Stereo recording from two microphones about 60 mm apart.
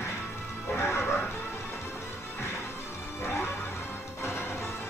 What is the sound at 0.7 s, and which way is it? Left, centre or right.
Music, left.